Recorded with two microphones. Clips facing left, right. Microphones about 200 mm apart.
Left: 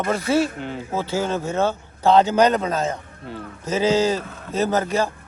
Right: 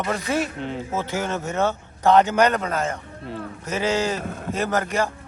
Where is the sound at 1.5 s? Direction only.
15° right (ahead or behind).